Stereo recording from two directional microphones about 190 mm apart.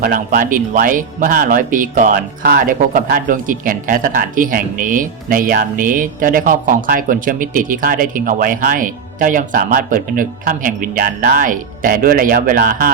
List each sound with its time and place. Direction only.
0.0 s speech: 45° right (ahead or behind)